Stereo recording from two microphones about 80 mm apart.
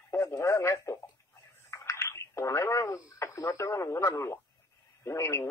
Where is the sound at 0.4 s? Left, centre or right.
Left.